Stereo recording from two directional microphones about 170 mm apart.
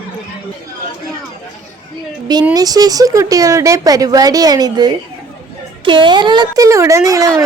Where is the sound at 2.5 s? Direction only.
20° right (ahead or behind).